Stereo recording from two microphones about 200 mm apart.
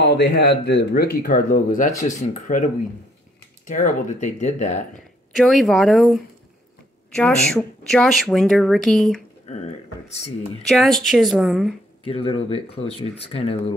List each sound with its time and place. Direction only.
0.0 s speech: 60° left (ahead or behind); by 4.8 s 35° left (ahead or behind)
5.3 s speech: centre (ahead or behind)
9.5 s speech: 35° left (ahead or behind)
10.7 s speech: centre (ahead or behind)
12.0 s speech: 30° left (ahead or behind)